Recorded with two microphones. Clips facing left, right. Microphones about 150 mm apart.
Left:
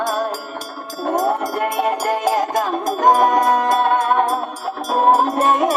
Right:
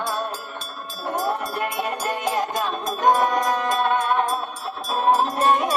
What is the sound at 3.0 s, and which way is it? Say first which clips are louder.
Music: left 5 dB; 45° left (ahead or behind).